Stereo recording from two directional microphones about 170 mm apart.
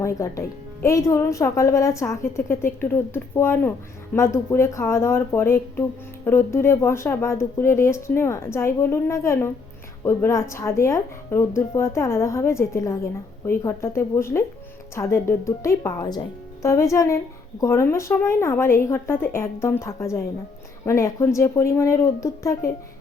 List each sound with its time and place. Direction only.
0.0 s a woman's voice: 20° left (ahead or behind)